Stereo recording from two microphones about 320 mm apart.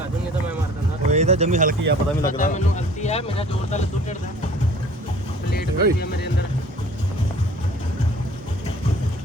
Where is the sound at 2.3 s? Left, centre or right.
Left.